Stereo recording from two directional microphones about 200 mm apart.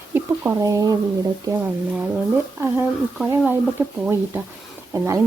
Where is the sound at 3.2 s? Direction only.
10° right (ahead or behind).